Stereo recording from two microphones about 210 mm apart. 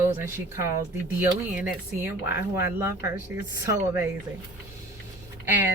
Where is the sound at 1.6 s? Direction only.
10° right (ahead or behind).